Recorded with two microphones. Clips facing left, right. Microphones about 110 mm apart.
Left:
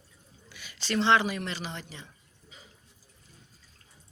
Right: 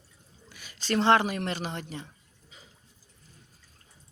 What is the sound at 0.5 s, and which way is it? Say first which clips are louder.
Speech: right 2 dB; 40° right (ahead or behind).